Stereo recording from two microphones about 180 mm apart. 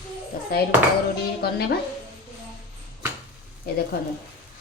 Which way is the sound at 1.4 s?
60° left (ahead or behind).